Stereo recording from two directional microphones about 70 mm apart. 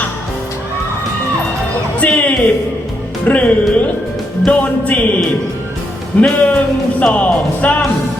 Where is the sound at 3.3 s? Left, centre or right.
Left.